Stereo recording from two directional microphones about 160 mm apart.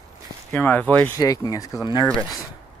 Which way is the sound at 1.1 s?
20° left (ahead or behind).